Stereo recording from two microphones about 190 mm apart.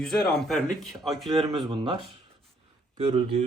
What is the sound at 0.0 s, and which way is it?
Speech, centre (ahead or behind).